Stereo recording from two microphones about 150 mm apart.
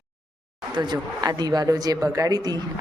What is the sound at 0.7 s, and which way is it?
Speech, 30° right (ahead or behind).